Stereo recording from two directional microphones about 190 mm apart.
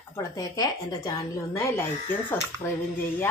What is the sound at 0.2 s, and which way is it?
Speech, 20° left (ahead or behind).